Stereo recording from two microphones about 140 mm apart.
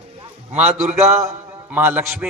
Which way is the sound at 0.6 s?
50° right (ahead or behind).